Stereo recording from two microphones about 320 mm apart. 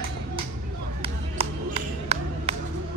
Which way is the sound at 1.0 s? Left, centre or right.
Centre.